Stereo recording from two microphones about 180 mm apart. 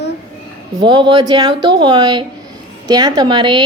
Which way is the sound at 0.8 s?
25° right (ahead or behind).